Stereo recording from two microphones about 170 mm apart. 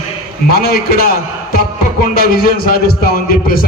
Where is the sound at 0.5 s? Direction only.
65° left (ahead or behind).